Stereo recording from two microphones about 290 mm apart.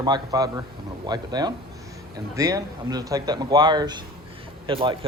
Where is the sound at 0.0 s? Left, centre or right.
Centre.